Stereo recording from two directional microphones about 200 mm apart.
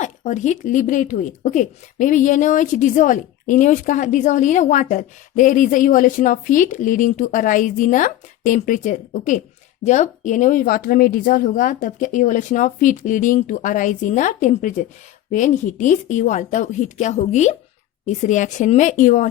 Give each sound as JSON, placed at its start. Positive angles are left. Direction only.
{"t": 0.0, "sound": "speech", "side_deg": 35}